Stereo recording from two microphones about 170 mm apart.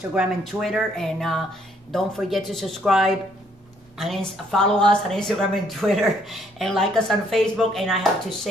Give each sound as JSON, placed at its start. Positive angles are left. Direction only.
{"t": 0.1, "sound": "speech", "side_deg": 0}